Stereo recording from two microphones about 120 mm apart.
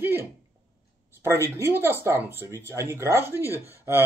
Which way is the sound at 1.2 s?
25° right (ahead or behind).